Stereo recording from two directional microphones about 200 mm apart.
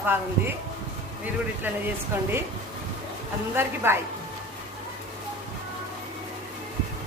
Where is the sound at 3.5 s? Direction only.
10° right (ahead or behind).